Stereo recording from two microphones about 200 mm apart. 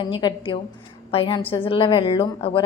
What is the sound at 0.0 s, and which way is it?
Speech, 20° left (ahead or behind).